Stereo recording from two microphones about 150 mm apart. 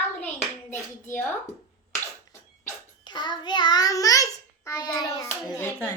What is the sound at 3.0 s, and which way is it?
A child's voice, 30° left (ahead or behind).